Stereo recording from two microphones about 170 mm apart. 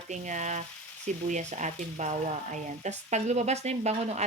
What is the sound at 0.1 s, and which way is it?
Speech, 45° right (ahead or behind).